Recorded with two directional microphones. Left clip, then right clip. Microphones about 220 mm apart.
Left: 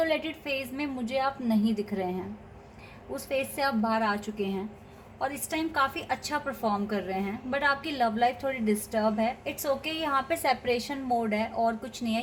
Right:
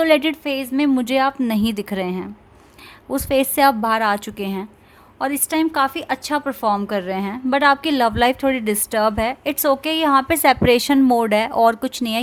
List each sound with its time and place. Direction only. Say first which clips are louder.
0.0 s a woman's voice: right 12 dB; 45° right (ahead or behind)
3.2 s a woman's voice: right 13 dB; 50° right (ahead or behind)